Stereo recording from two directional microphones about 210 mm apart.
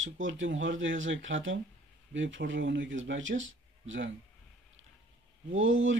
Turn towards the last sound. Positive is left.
turn(degrees=-65)  # may be behind; listen again after turning